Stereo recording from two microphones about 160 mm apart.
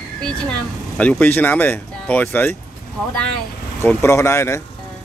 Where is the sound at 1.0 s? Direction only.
10° left (ahead or behind).